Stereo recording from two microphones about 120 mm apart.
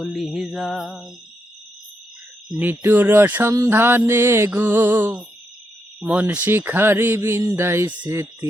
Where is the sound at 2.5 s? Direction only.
15° right (ahead or behind).